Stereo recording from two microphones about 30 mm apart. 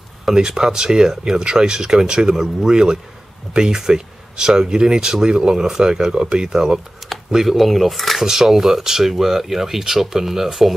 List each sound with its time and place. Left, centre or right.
0.4 s speech: right
7.0 s a sound: centre
7.4 s speech: centre
8.2 s speech: centre